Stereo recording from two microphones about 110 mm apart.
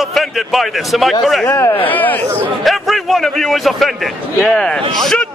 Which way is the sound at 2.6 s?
Centre (ahead or behind).